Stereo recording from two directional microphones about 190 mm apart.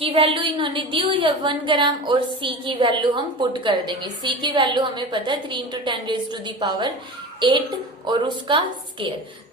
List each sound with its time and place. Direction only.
0.0 s a woman's voice: 30° right (ahead or behind)
8.0 s a woman's voice: 25° right (ahead or behind)